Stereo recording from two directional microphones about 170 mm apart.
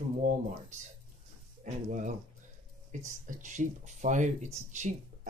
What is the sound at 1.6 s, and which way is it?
Speech, 45° right (ahead or behind).